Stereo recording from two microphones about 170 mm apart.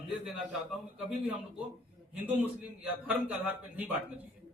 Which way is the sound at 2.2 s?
10° right (ahead or behind).